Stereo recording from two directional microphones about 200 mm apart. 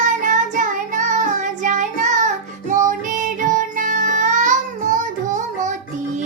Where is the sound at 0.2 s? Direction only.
40° right (ahead or behind).